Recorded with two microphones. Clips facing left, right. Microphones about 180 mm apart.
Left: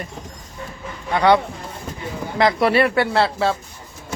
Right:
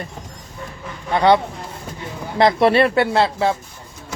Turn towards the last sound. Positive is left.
turn(degrees=-20)  # may be behind; listen again after turning